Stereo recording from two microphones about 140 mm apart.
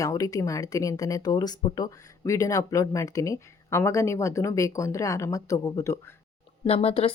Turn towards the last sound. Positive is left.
turn(degrees=45)  # may be behind; listen again after turning